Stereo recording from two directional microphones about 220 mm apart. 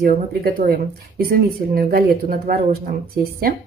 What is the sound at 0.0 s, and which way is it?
A woman's voice, 40° right (ahead or behind).